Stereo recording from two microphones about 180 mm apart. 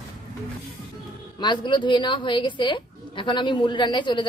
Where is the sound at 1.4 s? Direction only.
25° left (ahead or behind).